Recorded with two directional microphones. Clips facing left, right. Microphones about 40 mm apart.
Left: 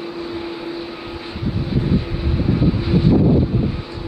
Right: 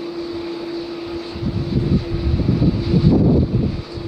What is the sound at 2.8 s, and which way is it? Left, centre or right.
Vehicle, left.